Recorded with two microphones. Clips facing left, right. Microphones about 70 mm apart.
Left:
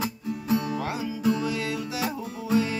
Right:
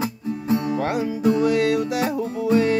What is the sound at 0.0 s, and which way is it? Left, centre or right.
Music, right.